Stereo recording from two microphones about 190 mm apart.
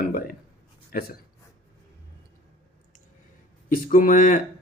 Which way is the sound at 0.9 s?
50° left (ahead or behind).